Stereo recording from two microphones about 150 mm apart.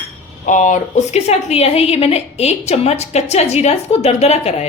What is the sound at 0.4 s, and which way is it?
A woman's voice, 55° left (ahead or behind).